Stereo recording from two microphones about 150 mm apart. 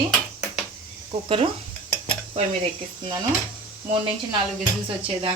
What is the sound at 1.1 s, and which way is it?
Speech, 40° right (ahead or behind).